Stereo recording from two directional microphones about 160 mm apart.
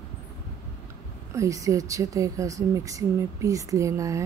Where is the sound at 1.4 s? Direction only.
20° right (ahead or behind).